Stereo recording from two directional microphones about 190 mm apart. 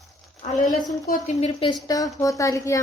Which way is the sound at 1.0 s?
40° left (ahead or behind).